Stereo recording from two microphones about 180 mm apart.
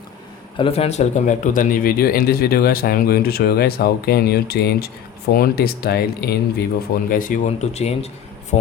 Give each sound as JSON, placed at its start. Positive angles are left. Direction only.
{"t": 0.5, "sound": "a man's voice", "side_deg": 30}